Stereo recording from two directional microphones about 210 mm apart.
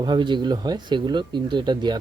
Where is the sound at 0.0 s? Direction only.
20° right (ahead or behind).